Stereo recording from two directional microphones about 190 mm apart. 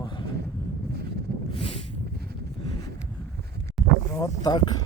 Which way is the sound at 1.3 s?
55° right (ahead or behind).